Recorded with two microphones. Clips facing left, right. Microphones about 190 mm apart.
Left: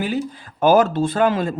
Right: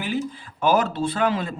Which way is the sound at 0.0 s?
40° left (ahead or behind).